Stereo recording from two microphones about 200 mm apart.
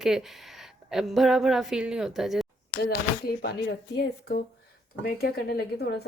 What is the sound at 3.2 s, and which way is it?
Speech, 50° left (ahead or behind).